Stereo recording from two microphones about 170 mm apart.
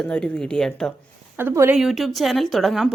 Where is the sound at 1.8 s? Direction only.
Centre (ahead or behind).